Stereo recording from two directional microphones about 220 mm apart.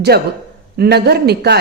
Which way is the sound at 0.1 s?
45° right (ahead or behind).